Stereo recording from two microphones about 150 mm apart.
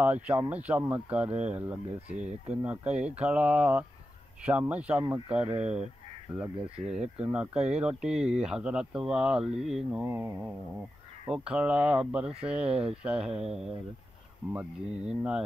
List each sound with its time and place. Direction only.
0.0 s speech: 10° right (ahead or behind)
1.3 s speech: 50° right (ahead or behind)
1.6 s speech: 10° right (ahead or behind)
2.1 s speech: 50° right (ahead or behind)
2.5 s speech: 10° right (ahead or behind)
6.5 s speech: 35° right (ahead or behind)
6.9 s speech: 5° right (ahead or behind)
14.5 s speech: 10° right (ahead or behind)